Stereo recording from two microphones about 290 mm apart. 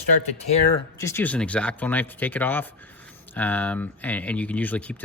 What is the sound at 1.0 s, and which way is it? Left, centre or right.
Speech, centre.